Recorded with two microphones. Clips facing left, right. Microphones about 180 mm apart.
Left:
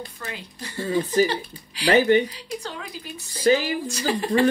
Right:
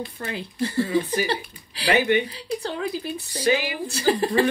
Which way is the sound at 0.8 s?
35° left (ahead or behind).